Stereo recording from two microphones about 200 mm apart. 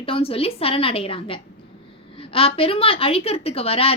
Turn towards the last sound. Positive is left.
turn(degrees=30)  # may be behind; listen again after turning